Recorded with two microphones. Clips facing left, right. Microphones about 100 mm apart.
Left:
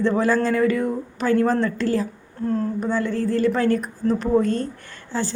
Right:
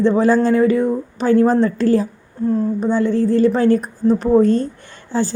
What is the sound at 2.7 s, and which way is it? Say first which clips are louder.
A woman's voice: right 6 dB; 25° right (ahead or behind).